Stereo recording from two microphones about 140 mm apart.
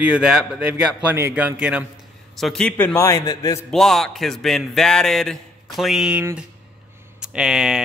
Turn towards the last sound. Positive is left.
turn(degrees=-5)  # may be behind; listen again after turning